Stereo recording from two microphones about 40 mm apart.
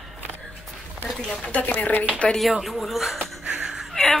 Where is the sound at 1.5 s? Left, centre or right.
Left.